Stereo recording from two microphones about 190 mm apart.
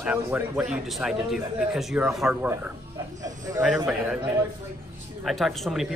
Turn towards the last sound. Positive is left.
turn(degrees=0)  # may be behind; listen again after turning